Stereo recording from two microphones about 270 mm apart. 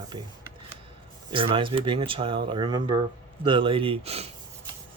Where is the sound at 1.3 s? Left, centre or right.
Centre.